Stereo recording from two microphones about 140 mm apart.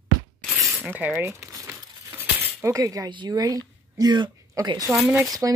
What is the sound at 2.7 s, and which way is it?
Speech, 25° right (ahead or behind).